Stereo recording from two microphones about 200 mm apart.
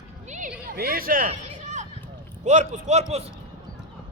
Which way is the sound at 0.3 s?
40° right (ahead or behind).